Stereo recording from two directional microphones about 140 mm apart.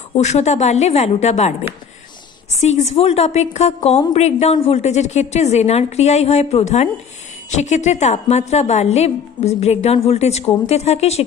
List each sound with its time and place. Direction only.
0.2 s a woman's voice: 55° left (ahead or behind)
2.6 s a woman's voice: 55° left (ahead or behind)